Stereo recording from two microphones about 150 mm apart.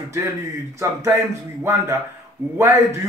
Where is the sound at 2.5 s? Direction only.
20° right (ahead or behind).